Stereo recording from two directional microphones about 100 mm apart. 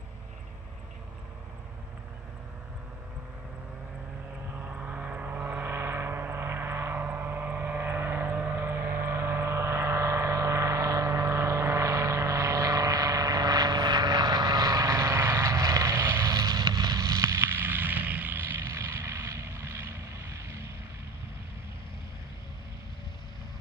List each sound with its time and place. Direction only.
4.6 s vehicle: 15° right (ahead or behind)